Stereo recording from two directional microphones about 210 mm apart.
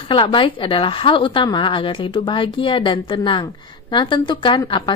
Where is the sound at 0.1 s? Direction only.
25° left (ahead or behind).